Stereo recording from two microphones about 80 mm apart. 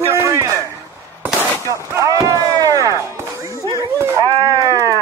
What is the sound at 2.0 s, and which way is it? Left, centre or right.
Chop, right.